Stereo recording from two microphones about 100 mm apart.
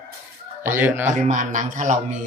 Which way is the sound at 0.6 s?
20° right (ahead or behind).